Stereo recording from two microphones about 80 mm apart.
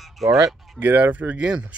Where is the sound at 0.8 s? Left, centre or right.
Right.